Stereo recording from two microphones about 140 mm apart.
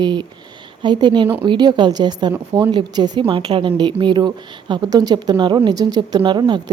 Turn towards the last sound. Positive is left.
turn(degrees=-30)  # may be behind; listen again after turning